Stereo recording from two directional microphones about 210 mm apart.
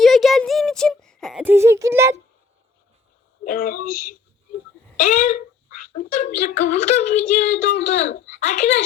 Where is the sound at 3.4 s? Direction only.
45° left (ahead or behind).